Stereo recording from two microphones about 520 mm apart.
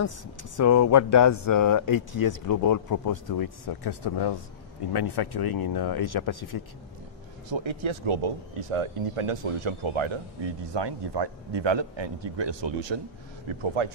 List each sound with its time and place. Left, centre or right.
0.6 s speech: left
7.4 s speech: right
10.6 s a man's voice: right
13.5 s speech: right